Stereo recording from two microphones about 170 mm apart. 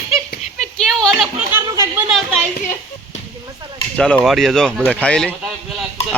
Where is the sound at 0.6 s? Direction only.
5° left (ahead or behind).